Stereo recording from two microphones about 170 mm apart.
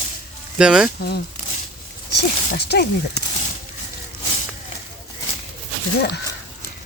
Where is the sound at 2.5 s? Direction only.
70° left (ahead or behind).